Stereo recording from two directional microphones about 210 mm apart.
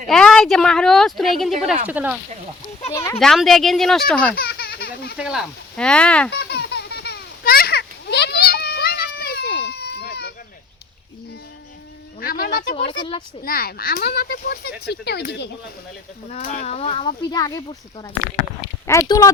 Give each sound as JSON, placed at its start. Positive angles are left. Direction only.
{"t": 0.1, "sound": "a woman's voice", "side_deg": 5}
{"t": 2.9, "sound": "speech", "side_deg": 15}
{"t": 3.2, "sound": "a woman's voice", "side_deg": 0}
{"t": 4.4, "sound": "a sound", "side_deg": 50}
{"t": 5.1, "sound": "a woman's voice", "side_deg": -5}
{"t": 6.3, "sound": "a sound", "side_deg": 55}
{"t": 12.2, "sound": "a sound", "side_deg": 45}
{"t": 12.9, "sound": "speech", "side_deg": 20}
{"t": 13.4, "sound": "speech", "side_deg": 45}
{"t": 16.3, "sound": "speech", "side_deg": 35}